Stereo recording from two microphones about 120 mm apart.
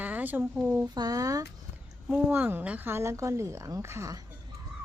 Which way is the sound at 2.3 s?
15° right (ahead or behind).